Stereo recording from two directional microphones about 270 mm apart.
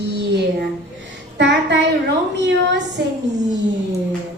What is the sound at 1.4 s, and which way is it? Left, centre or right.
Speech, right.